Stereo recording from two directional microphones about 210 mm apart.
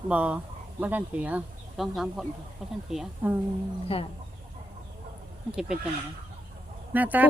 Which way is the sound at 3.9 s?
25° left (ahead or behind).